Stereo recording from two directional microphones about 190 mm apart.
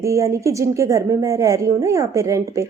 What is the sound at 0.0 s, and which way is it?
A woman's voice, 15° right (ahead or behind).